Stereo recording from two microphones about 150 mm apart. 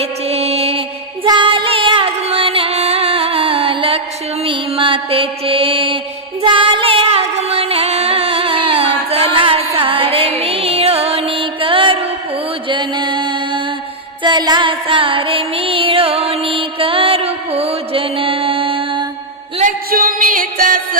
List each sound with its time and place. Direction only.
0.0 s music: 40° right (ahead or behind)
4.4 s mantra: 35° right (ahead or behind)
6.4 s music: 35° right (ahead or behind)
19.6 s music: 70° right (ahead or behind)